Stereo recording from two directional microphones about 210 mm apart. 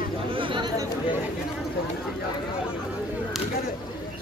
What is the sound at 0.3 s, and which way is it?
Chatter, 25° right (ahead or behind).